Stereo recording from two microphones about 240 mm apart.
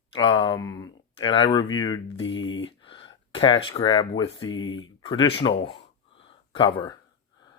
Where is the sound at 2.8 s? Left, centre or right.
Left.